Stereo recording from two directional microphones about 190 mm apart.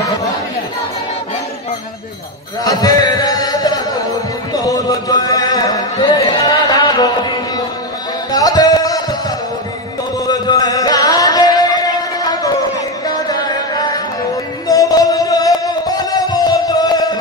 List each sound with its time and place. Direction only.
2.6 s a sound: 20° left (ahead or behind)
8.3 s music: 20° left (ahead or behind)
10.1 s chant: 20° left (ahead or behind)
13.0 s music: 20° left (ahead or behind)